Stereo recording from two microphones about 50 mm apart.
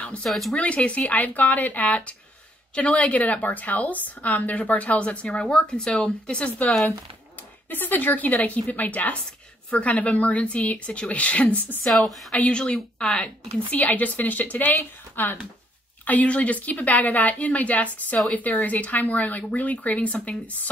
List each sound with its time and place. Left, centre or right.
0.0 s a sound: left
0.3 s speech: centre
0.6 s a woman's voice: left
7.7 s a woman's voice: left
11.8 s a woman's voice: centre
12.4 s a woman's voice: left
13.7 s a woman's voice: left